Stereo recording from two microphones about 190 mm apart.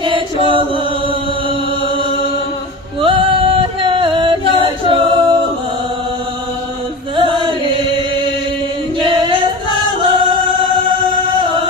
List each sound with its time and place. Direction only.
0.0 s chant: 25° right (ahead or behind)
3.0 s music: 25° right (ahead or behind)
4.6 s a capella: 25° right (ahead or behind)
7.2 s chant: 25° right (ahead or behind)
9.0 s music: 25° right (ahead or behind)
11.4 s singing: 25° right (ahead or behind)